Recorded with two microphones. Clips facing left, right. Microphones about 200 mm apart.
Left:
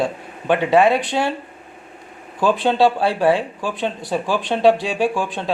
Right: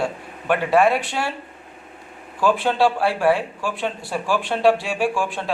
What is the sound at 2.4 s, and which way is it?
Speech, 20° left (ahead or behind).